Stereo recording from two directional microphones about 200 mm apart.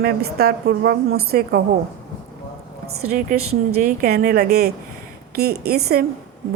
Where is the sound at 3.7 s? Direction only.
45° right (ahead or behind).